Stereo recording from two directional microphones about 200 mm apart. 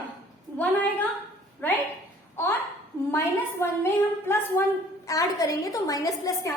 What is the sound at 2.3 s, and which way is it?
Speech, 10° left (ahead or behind).